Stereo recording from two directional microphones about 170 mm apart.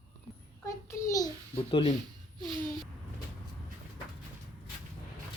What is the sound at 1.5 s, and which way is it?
Speech, 30° left (ahead or behind).